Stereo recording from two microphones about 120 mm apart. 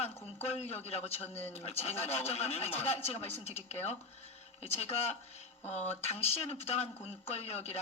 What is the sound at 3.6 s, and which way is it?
Speech, 60° left (ahead or behind).